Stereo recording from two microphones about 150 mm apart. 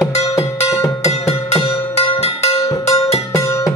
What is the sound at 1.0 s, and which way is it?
Music, 45° left (ahead or behind).